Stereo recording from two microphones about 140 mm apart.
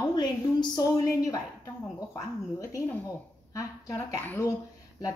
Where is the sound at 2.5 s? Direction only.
20° left (ahead or behind).